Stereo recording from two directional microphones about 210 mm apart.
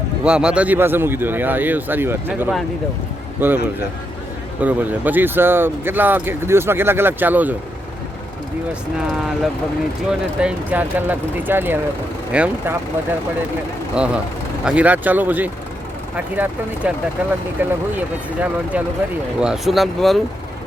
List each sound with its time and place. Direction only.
0.3 s speech: 5° right (ahead or behind)
4.6 s speech: 5° right (ahead or behind)
10.1 s speech: 5° right (ahead or behind)
13.9 s speech: 5° right (ahead or behind)